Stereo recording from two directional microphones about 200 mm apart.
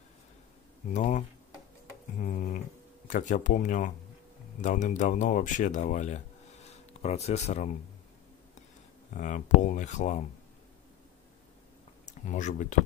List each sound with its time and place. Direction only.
0.9 s speech: 35° left (ahead or behind)
2.2 s speech: 40° left (ahead or behind)
9.1 s speech: 40° left (ahead or behind)
12.1 s speech: 40° left (ahead or behind)